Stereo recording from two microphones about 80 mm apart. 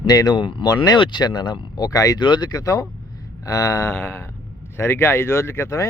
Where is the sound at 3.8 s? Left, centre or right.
Left.